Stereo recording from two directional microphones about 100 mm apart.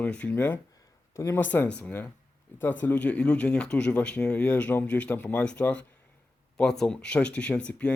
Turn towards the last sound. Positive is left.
turn(degrees=10)  # may be behind; listen again after turning